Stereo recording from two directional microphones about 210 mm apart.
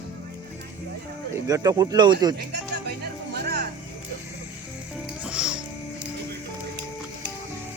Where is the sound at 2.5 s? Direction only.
55° right (ahead or behind).